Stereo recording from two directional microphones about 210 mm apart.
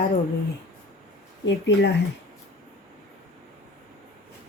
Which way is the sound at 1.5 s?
55° left (ahead or behind).